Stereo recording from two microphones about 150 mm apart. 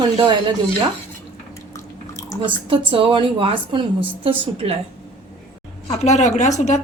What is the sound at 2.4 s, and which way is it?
A woman's voice, 35° right (ahead or behind).